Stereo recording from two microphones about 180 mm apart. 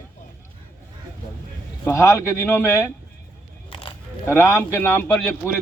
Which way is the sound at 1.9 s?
15° left (ahead or behind).